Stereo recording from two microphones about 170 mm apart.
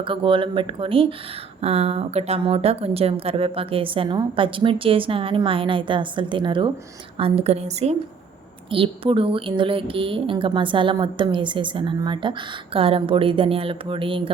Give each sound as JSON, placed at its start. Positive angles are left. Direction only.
{"t": 0.0, "sound": "a woman's voice", "side_deg": -30}